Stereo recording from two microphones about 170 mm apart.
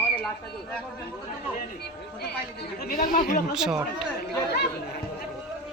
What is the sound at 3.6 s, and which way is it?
Speech, 5° right (ahead or behind).